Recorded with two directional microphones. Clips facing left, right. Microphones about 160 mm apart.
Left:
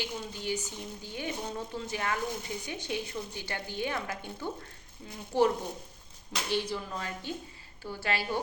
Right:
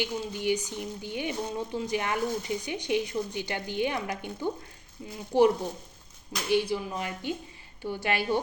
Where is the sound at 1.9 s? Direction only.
20° right (ahead or behind).